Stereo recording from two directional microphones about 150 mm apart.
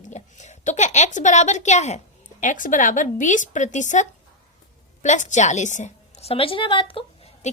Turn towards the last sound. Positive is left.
turn(degrees=35)  # may be behind; listen again after turning